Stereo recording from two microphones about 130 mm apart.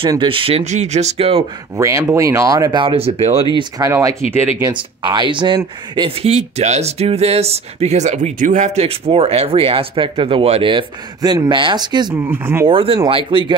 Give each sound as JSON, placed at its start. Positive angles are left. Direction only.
{"t": 0.1, "sound": "speech", "side_deg": -40}
{"t": 1.8, "sound": "speech", "side_deg": -25}
{"t": 2.8, "sound": "speech", "side_deg": -45}
{"t": 3.5, "sound": "speech", "side_deg": -30}
{"t": 6.2, "sound": "speech", "side_deg": -55}
{"t": 12.3, "sound": "speech", "side_deg": -20}
{"t": 12.6, "sound": "speech", "side_deg": -45}